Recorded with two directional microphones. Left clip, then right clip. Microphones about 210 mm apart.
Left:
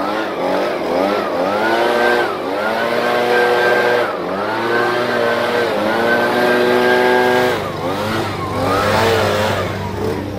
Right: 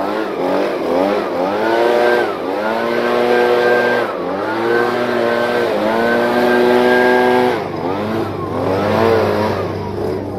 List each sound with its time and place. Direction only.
6.7 s vehicle: 40° right (ahead or behind)